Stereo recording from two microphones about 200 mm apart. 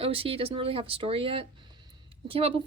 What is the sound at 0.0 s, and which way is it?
A woman's voice, 30° right (ahead or behind).